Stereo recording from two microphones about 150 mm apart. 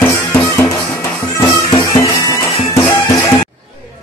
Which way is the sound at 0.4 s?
15° left (ahead or behind).